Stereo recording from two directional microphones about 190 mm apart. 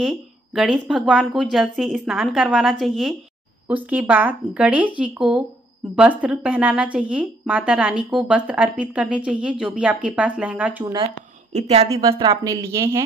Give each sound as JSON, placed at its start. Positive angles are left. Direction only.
{"t": 0.6, "sound": "a woman's voice", "side_deg": 0}
{"t": 11.5, "sound": "a woman's voice", "side_deg": -35}
{"t": 12.1, "sound": "speech", "side_deg": -20}